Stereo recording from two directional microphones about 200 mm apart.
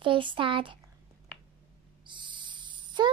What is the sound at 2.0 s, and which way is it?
Owl, 25° right (ahead or behind).